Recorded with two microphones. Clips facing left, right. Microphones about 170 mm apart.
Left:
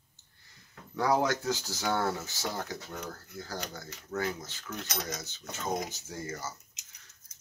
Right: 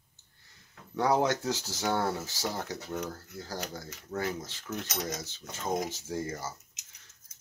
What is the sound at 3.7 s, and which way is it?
Speech, 30° right (ahead or behind).